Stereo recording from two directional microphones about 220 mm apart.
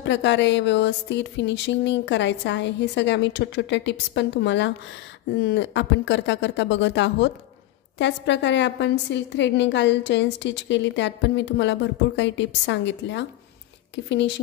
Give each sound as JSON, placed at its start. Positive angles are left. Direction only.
{"t": 0.0, "sound": "a woman's voice", "side_deg": 55}